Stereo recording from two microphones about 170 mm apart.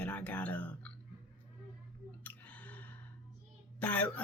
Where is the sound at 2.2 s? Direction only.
10° left (ahead or behind).